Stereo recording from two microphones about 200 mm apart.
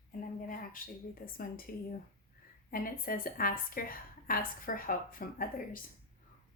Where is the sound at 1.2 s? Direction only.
45° left (ahead or behind).